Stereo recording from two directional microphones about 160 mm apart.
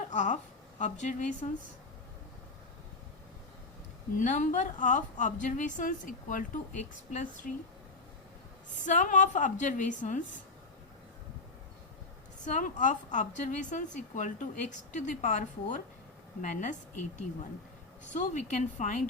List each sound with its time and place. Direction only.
0.1 s a sound: 50° left (ahead or behind)
0.8 s a woman's voice: 50° left (ahead or behind)
4.1 s a woman's voice: 50° left (ahead or behind)
8.7 s a woman's voice: 50° left (ahead or behind)
12.5 s a woman's voice: 50° left (ahead or behind)
18.1 s a woman's voice: 50° left (ahead or behind)